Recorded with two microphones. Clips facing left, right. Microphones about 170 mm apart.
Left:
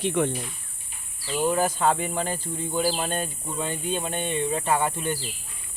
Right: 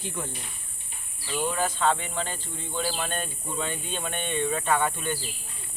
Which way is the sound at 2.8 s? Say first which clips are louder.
Left 5 dB; 30° left (ahead or behind).